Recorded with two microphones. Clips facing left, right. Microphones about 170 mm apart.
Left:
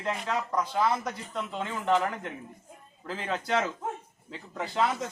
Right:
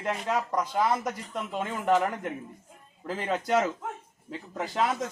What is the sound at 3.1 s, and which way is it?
Speech, 10° right (ahead or behind).